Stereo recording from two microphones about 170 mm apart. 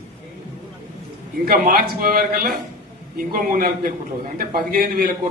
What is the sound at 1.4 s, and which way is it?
A man's voice, 55° right (ahead or behind).